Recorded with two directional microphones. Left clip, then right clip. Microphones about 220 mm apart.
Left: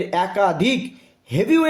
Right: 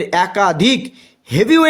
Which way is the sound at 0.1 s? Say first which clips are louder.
Right 5 dB; 45° right (ahead or behind).